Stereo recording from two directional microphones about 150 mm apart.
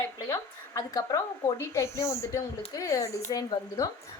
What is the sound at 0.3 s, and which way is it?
A woman's voice, 20° left (ahead or behind).